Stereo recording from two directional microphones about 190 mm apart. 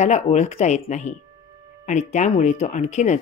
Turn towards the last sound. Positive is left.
turn(degrees=40)  # may be behind; listen again after turning